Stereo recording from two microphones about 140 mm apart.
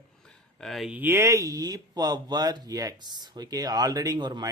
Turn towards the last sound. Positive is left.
turn(degrees=-30)  # may be behind; listen again after turning